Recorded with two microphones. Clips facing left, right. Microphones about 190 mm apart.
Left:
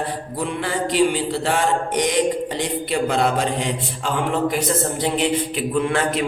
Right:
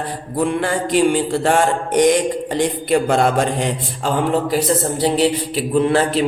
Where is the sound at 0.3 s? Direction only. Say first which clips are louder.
Right 6 dB; 50° right (ahead or behind).